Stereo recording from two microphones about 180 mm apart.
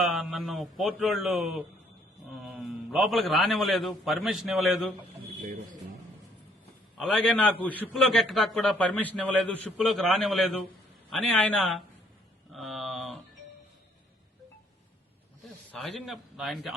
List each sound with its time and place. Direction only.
0.0 s a man's voice: centre (ahead or behind)
5.4 s a man's voice: 45° right (ahead or behind)
6.9 s a man's voice: centre (ahead or behind)
12.5 s a sound: centre (ahead or behind)
15.7 s a man's voice: centre (ahead or behind)